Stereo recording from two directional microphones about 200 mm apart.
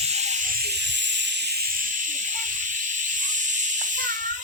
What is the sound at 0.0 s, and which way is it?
Snake, 35° right (ahead or behind).